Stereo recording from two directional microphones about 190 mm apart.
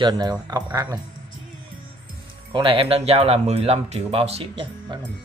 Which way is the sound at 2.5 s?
30° right (ahead or behind).